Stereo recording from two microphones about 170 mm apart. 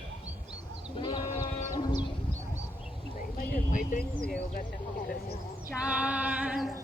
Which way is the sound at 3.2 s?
55° left (ahead or behind).